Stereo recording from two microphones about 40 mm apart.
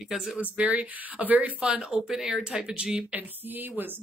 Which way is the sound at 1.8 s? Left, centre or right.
Centre.